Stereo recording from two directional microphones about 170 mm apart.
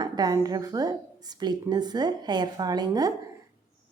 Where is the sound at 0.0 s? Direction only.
25° right (ahead or behind).